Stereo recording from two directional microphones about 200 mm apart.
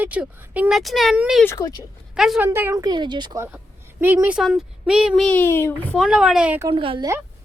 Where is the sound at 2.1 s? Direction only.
5° right (ahead or behind); by 3.4 s 20° right (ahead or behind).